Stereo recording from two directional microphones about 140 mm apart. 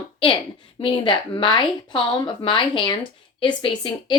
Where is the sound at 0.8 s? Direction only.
40° left (ahead or behind).